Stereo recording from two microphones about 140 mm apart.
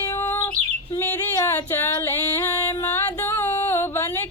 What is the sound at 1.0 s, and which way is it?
Music, 15° left (ahead or behind).